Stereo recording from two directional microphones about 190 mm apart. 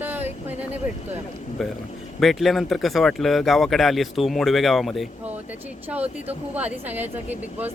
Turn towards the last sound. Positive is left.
turn(degrees=-10)  # may be behind; listen again after turning